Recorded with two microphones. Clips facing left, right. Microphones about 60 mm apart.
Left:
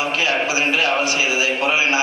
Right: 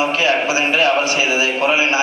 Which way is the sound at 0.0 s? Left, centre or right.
Right.